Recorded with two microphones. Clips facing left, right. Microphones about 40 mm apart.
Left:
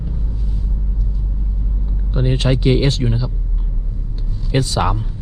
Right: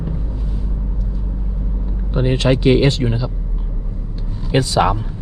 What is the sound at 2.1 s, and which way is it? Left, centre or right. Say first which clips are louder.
Speech: right 3 dB; right.